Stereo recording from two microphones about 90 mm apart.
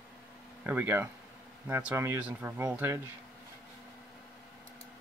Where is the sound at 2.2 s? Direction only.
15° right (ahead or behind).